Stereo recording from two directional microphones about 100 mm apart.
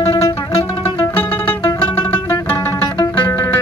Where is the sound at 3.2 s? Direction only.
20° left (ahead or behind).